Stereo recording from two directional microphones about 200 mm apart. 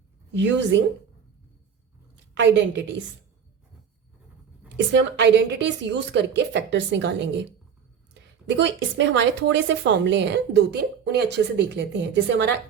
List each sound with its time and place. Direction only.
0.3 s a woman's voice: 65° right (ahead or behind)
2.1 s a woman's voice: 65° right (ahead or behind)
4.9 s a woman's voice: 60° right (ahead or behind)
8.4 s a woman's voice: 65° right (ahead or behind)